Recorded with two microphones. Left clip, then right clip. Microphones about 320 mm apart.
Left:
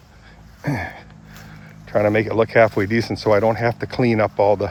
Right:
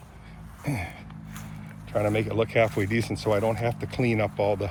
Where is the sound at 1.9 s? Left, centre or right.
Left.